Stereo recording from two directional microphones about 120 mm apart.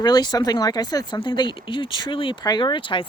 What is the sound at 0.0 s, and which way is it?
Speech, 35° left (ahead or behind).